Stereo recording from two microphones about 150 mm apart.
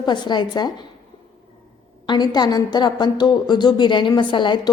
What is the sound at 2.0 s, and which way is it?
A woman's voice, 30° left (ahead or behind).